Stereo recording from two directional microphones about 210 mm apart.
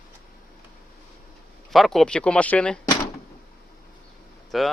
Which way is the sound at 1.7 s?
Centre (ahead or behind).